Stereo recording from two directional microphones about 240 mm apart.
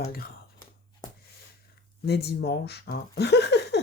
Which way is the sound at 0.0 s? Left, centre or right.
Left.